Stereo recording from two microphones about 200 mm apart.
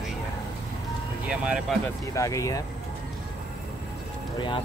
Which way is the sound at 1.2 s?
5° right (ahead or behind).